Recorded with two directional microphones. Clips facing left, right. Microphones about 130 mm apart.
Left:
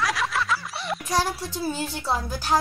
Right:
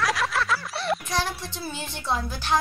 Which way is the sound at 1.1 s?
40° left (ahead or behind).